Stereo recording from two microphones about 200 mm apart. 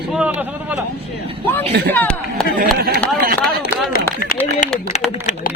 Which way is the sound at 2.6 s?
50° right (ahead or behind).